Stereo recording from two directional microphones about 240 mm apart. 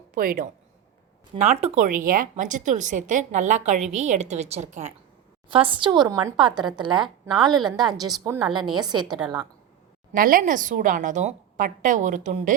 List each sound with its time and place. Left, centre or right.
0.1 s a woman's voice: right; by 9.1 s centre
10.1 s a woman's voice: right